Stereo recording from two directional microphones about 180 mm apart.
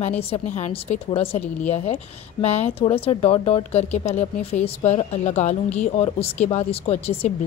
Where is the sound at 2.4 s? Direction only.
40° left (ahead or behind).